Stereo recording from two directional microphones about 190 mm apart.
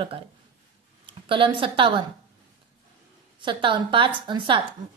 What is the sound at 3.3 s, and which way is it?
A woman's voice, 25° right (ahead or behind).